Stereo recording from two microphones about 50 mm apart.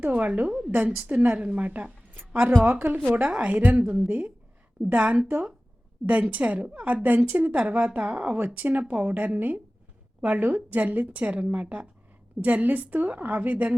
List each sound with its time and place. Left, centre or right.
0.0 s a woman's voice: right
3.2 s a woman's voice: right
8.5 s a woman's voice: right